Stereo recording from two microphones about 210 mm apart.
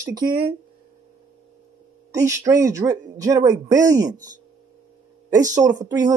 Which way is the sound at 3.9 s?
35° right (ahead or behind).